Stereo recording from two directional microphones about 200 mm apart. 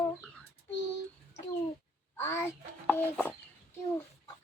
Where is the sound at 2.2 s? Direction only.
15° left (ahead or behind).